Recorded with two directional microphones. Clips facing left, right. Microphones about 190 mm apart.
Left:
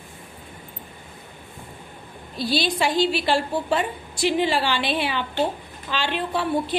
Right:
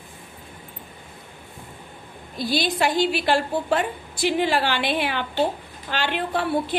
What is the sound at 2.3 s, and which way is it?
A woman's voice, 50° right (ahead or behind).